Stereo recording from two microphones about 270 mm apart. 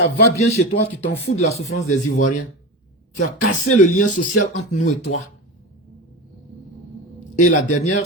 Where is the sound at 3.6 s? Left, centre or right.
Left.